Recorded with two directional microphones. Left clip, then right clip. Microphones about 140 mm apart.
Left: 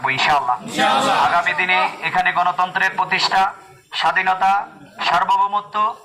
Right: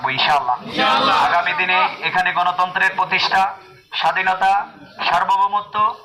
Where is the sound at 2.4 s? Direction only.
10° left (ahead or behind).